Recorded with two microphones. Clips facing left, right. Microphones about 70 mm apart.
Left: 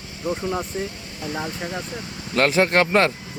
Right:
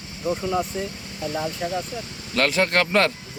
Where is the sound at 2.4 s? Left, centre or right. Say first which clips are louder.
Left 3 dB; centre.